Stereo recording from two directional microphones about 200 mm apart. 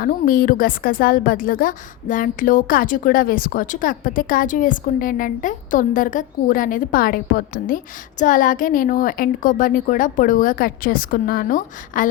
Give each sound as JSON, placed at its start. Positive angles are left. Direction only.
{"t": 0.0, "sound": "a woman's voice", "side_deg": 45}